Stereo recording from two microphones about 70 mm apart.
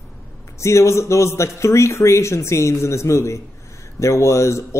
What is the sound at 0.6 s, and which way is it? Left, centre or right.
Speech, left.